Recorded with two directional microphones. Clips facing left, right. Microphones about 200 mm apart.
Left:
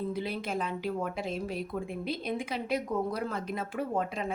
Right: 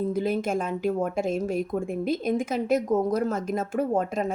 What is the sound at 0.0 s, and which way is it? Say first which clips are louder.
A woman's voice: right 8 dB; 45° right (ahead or behind).